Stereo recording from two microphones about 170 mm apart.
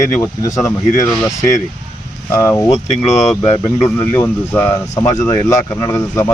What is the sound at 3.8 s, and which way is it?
Speech, 15° left (ahead or behind).